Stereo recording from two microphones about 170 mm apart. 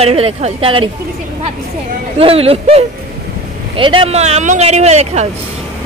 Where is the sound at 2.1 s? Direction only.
35° right (ahead or behind).